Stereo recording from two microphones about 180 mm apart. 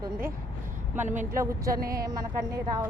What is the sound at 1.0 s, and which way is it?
Speech, 45° right (ahead or behind).